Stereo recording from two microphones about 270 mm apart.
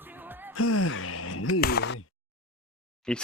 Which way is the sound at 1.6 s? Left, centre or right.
Left.